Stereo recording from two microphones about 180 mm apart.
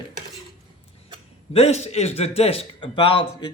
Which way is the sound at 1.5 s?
35° left (ahead or behind).